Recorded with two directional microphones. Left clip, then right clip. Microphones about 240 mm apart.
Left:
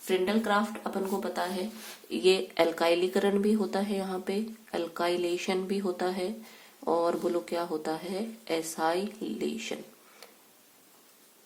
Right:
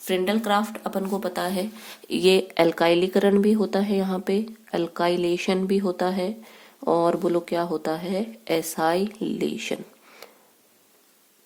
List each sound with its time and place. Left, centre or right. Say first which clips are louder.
0.0 s a woman's voice: right 4 dB; right